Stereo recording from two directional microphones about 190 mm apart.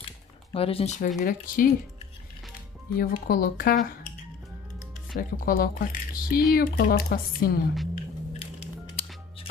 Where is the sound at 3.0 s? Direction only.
50° left (ahead or behind).